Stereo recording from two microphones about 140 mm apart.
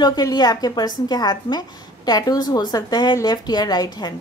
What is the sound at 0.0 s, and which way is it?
A woman's voice, 30° left (ahead or behind).